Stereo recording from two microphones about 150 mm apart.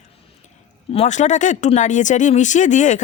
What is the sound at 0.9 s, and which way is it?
Speech, 50° left (ahead or behind).